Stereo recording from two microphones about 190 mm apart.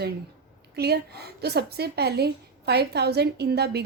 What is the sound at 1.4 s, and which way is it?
Speech, 55° right (ahead or behind).